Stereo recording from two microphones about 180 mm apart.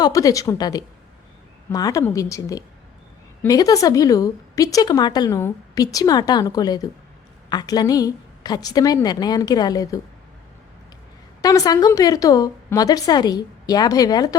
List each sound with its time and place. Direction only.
0.0 s a woman's voice: 20° left (ahead or behind)
11.4 s a woman's voice: 20° left (ahead or behind)